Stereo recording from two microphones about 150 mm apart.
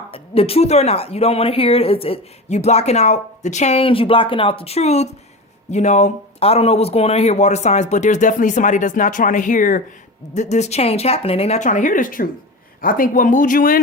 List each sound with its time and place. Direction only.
0.1 s speech: 40° left (ahead or behind); by 9.8 s 60° left (ahead or behind)
10.3 s speech: 50° left (ahead or behind)